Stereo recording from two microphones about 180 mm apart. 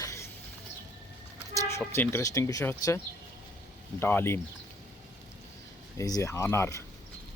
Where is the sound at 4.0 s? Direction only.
10° left (ahead or behind).